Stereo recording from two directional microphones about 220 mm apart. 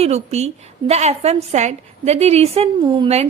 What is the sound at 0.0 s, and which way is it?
A woman's voice, 30° right (ahead or behind).